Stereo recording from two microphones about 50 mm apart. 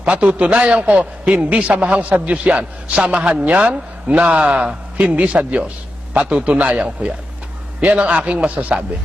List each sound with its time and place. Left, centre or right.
0.0 s a man's voice: right